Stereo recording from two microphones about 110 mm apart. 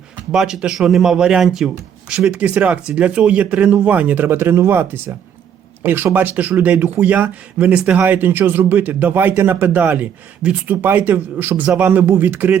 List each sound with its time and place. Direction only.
0.3 s speech: 5° right (ahead or behind)